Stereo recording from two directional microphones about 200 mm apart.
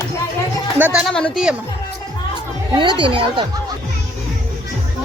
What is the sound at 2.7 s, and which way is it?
Speech, 25° right (ahead or behind).